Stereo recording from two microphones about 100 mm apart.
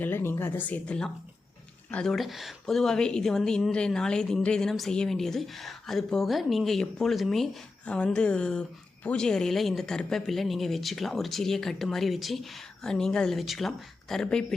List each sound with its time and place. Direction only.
0.0 s a woman's voice: 20° left (ahead or behind); by 14.4 s 5° left (ahead or behind)